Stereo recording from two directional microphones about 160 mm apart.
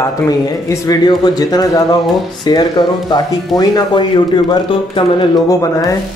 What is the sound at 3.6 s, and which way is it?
Speech, 25° left (ahead or behind).